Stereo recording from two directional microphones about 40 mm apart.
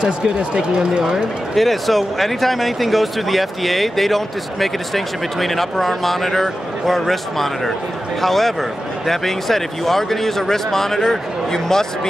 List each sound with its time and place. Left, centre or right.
0.6 s speech: centre
1.1 s speech: centre